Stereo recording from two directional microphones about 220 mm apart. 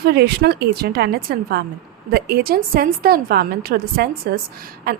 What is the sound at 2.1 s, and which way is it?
A woman's voice, 45° right (ahead or behind).